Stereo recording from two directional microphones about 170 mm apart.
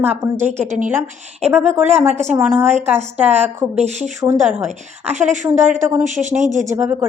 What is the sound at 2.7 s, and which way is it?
Speech, 40° right (ahead or behind).